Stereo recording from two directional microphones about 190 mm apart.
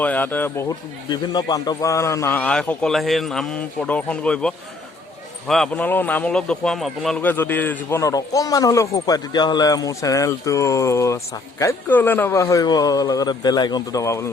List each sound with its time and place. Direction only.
0.0 s speech: 10° left (ahead or behind)
1.1 s a man's voice: 20° left (ahead or behind)